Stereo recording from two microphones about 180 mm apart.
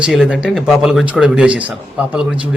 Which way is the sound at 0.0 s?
5° right (ahead or behind).